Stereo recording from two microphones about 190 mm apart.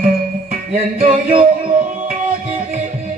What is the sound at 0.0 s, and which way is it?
Music, 50° right (ahead or behind).